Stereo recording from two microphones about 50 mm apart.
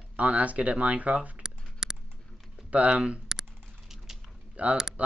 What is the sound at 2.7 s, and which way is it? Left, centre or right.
Speech, right.